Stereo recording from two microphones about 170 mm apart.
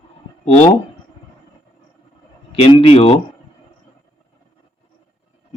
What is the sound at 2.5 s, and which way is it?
Speech, 35° left (ahead or behind).